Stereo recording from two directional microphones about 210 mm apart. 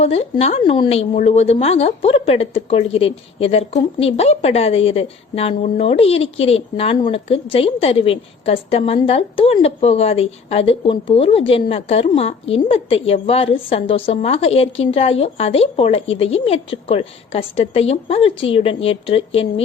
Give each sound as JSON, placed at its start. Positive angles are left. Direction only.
{"t": 0.0, "sound": "a woman's voice", "side_deg": 30}